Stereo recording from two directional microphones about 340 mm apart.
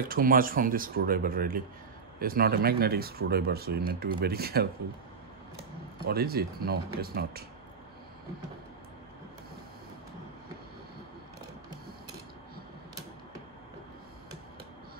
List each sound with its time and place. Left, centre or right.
0.1 s speech: right
6.0 s speech: right